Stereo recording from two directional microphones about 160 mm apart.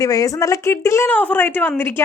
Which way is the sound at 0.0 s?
20° left (ahead or behind).